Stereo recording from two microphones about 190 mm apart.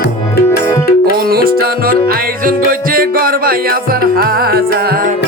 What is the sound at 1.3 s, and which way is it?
Music, 55° right (ahead or behind).